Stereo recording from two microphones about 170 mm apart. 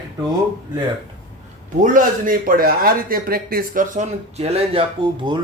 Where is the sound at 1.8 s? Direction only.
50° right (ahead or behind).